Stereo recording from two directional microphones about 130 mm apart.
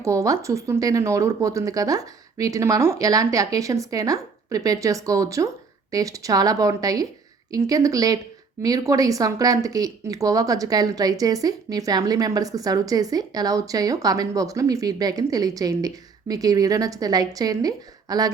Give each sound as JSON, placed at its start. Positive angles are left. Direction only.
{"t": 0.0, "sound": "speech", "side_deg": -25}